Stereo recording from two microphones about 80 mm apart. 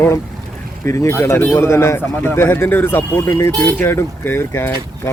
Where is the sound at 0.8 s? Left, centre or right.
Left.